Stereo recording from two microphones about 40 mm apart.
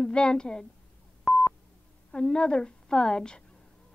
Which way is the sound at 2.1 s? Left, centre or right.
Left.